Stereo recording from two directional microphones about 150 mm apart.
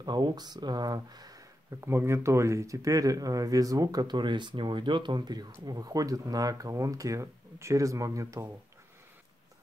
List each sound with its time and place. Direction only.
0.0 s speech: 30° right (ahead or behind)